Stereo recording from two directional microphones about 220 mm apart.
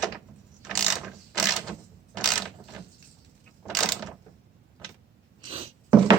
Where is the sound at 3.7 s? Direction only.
Centre (ahead or behind).